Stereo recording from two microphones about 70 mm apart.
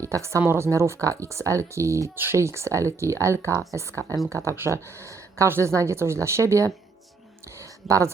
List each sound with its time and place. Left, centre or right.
0.0 s speech: right
2.1 s speech: right
7.6 s a sound: right